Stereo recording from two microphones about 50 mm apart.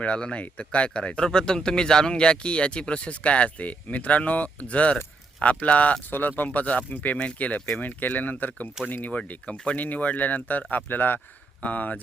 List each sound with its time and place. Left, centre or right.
0.0 s speech: left
6.1 s speech: left
11.6 s speech: left